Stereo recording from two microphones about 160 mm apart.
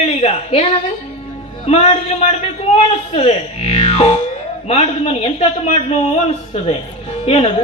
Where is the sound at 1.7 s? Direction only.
40° left (ahead or behind).